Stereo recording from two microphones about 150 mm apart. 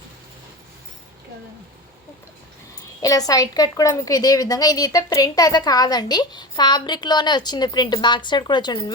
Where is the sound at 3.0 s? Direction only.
25° left (ahead or behind).